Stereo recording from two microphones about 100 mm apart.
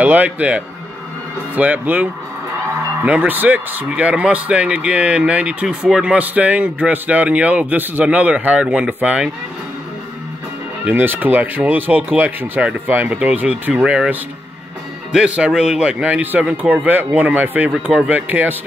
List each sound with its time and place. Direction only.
0.0 s a man's voice: 15° right (ahead or behind)
10.9 s a man's voice: 20° right (ahead or behind)
15.1 s a man's voice: 10° right (ahead or behind)